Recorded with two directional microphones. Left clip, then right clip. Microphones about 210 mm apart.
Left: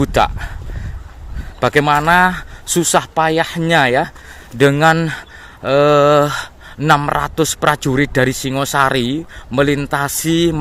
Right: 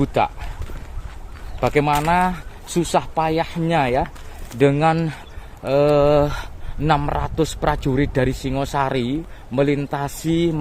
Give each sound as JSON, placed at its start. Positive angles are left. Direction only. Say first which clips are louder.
{"t": 0.0, "sound": "speech", "louder": "left 5 dB", "side_deg": 40}
{"t": 1.6, "sound": "speech", "louder": "left 5 dB", "side_deg": 40}